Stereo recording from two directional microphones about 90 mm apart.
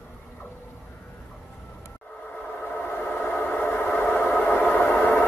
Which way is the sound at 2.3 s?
20° left (ahead or behind).